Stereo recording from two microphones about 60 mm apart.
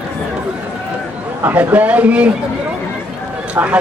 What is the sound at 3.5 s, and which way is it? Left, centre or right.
Speech, right.